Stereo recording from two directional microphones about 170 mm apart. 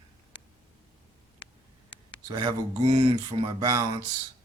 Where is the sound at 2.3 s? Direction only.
30° right (ahead or behind).